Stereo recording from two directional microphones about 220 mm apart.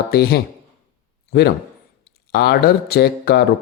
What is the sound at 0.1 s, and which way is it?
A man's voice, 45° left (ahead or behind).